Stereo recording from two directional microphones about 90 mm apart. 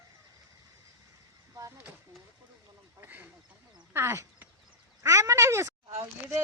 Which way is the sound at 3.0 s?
20° right (ahead or behind).